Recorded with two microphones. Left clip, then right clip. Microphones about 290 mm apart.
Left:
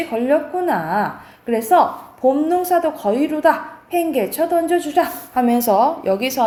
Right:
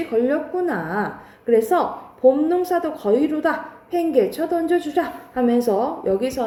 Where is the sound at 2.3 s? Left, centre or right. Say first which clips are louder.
Left 3 dB; centre.